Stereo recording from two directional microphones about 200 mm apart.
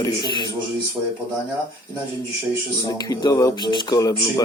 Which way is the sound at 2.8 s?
20° left (ahead or behind).